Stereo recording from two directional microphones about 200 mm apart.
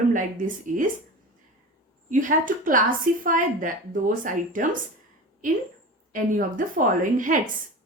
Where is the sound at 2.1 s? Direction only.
40° right (ahead or behind).